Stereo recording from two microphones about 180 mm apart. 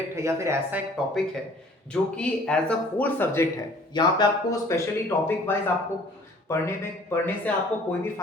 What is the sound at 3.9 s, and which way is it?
Speech, 25° left (ahead or behind).